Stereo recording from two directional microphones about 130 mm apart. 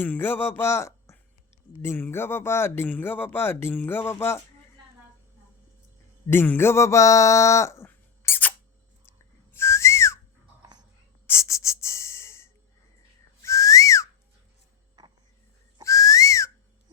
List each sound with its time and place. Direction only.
0.0 s speech: 15° left (ahead or behind)
6.2 s a sound: 15° left (ahead or behind)
9.5 s whistling: 20° left (ahead or behind)
11.3 s a sound: 20° left (ahead or behind)
13.4 s whistling: 25° left (ahead or behind)
15.8 s whistling: 25° left (ahead or behind)